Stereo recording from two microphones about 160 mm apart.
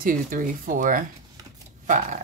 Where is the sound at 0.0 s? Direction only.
60° right (ahead or behind).